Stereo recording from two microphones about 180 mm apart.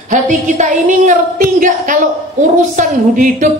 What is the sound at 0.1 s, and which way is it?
A woman's voice, 45° right (ahead or behind).